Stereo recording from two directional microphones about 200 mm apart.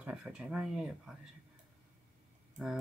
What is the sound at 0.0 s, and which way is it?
Speech, 5° right (ahead or behind).